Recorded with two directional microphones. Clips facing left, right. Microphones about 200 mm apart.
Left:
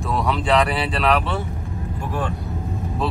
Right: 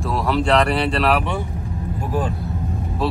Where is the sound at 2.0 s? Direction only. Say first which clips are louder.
Right 3 dB; 35° right (ahead or behind).